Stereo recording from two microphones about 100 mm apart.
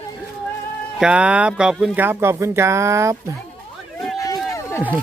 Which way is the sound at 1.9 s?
20° right (ahead or behind).